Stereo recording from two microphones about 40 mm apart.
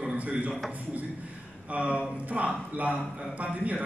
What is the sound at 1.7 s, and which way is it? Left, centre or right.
Speech, right.